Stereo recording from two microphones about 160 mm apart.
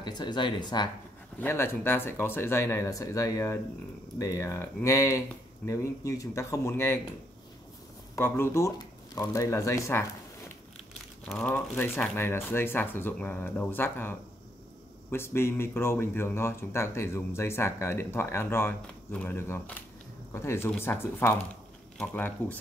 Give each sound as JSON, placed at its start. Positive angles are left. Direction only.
{"t": 0.0, "sound": "speech", "side_deg": 25}
{"t": 1.4, "sound": "speech", "side_deg": 15}
{"t": 8.2, "sound": "speech", "side_deg": 15}
{"t": 11.2, "sound": "speech", "side_deg": 10}